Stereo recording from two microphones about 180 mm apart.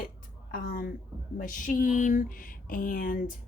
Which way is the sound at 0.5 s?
50° left (ahead or behind).